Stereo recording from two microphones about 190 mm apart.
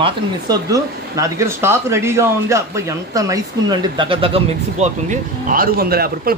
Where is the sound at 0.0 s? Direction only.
20° right (ahead or behind).